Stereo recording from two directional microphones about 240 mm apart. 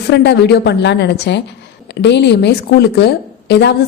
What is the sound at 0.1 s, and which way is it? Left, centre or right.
A woman's voice, left.